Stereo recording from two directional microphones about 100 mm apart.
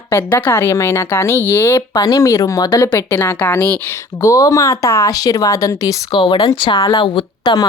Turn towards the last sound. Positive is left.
turn(degrees=50)  # may be behind; listen again after turning